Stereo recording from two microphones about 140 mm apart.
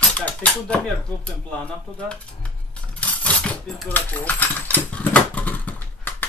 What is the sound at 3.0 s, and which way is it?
Coin, 5° left (ahead or behind).